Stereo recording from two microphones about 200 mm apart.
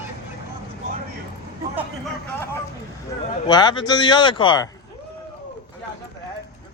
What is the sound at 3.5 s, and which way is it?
Speech, 20° left (ahead or behind).